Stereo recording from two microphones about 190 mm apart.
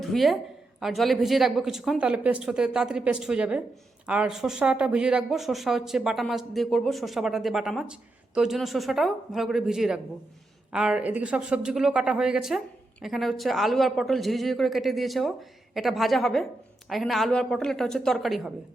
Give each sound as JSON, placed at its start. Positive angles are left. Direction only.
{"t": 0.0, "sound": "a woman's voice", "side_deg": 0}